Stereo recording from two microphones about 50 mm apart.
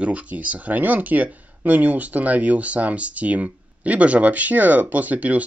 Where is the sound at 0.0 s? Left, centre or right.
Right.